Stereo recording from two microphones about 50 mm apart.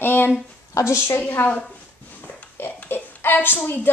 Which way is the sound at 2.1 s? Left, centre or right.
Left.